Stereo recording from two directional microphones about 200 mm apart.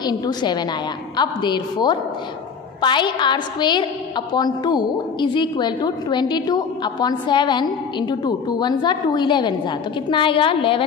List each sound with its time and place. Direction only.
0.0 s a woman's voice: 20° left (ahead or behind)